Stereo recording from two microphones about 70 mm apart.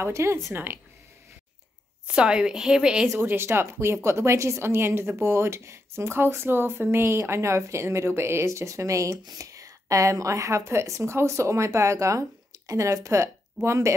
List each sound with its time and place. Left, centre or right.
0.0 s a woman's voice: right
2.0 s a woman's voice: centre
3.2 s a woman's voice: right